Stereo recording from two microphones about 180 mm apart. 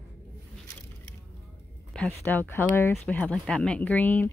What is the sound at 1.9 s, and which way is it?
Speech, 10° left (ahead or behind).